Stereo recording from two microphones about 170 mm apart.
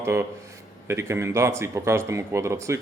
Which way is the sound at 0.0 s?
15° right (ahead or behind).